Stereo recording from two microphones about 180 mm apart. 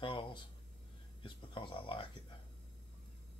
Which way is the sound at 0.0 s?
25° left (ahead or behind).